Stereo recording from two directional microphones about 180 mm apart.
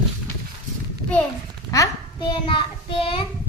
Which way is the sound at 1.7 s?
25° left (ahead or behind).